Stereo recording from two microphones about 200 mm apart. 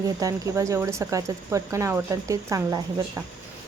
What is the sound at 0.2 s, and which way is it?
Speech, 15° right (ahead or behind).